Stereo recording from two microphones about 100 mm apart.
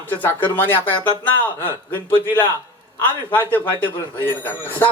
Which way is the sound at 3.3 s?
20° left (ahead or behind).